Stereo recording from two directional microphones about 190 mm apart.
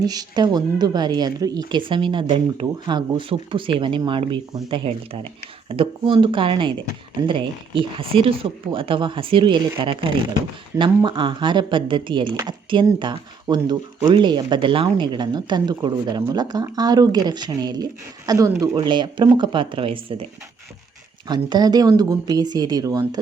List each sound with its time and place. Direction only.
0.0 s speech: 20° right (ahead or behind)
7.8 s speech: 30° right (ahead or behind)
21.2 s speech: 20° right (ahead or behind)